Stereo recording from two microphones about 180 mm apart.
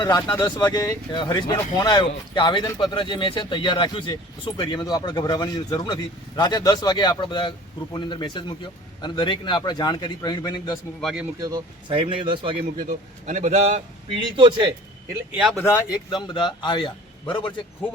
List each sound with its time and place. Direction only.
0.0 s speech: 20° left (ahead or behind)
11.0 s speech: 5° right (ahead or behind)
11.4 s speech: 25° right (ahead or behind)
12.8 s speech: 45° right (ahead or behind)
14.1 s speech: 25° right (ahead or behind)
15.9 s speech: 25° left (ahead or behind)